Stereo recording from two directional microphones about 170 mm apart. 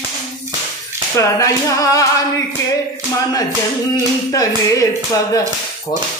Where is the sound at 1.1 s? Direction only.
20° left (ahead or behind).